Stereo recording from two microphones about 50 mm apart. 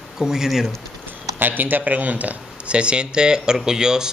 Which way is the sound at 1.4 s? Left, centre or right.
Right.